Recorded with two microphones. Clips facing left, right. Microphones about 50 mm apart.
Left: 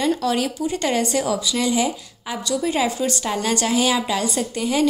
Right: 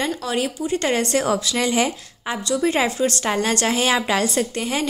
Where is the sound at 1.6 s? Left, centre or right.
Right.